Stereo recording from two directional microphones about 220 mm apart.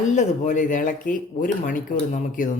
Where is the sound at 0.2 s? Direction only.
35° left (ahead or behind).